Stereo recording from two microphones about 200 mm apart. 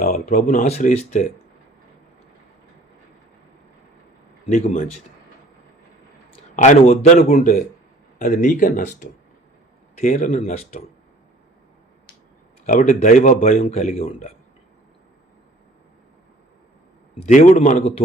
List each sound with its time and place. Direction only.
0.0 s a man's voice: 40° left (ahead or behind)
4.5 s a man's voice: 40° left (ahead or behind)
6.3 s a man's voice: 35° left (ahead or behind)
12.6 s a man's voice: 40° left (ahead or behind)
17.2 s a man's voice: 35° left (ahead or behind)